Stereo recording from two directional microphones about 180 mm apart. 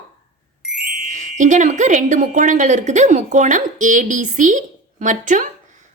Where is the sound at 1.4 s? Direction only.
45° right (ahead or behind).